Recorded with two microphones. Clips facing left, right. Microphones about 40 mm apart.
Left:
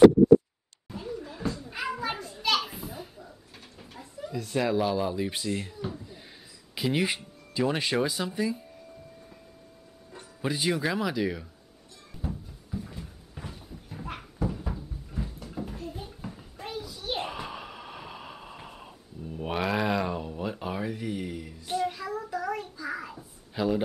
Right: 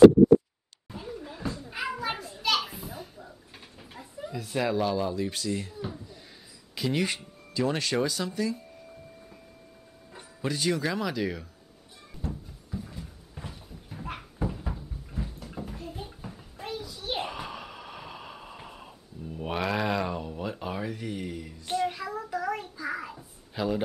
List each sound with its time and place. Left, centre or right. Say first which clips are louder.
0.8 s children playing: left 2 dB; centre
3.9 s speech: left 1 dB; centre
5.1 s speech: even; centre
5.8 s a sound: left 1 dB; centre
6.7 s speech: left 1 dB; centre
10.4 s speech: even; centre
12.2 s a sound: even; centre